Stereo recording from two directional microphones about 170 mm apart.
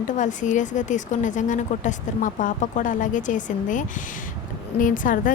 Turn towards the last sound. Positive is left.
turn(degrees=50)  # may be behind; listen again after turning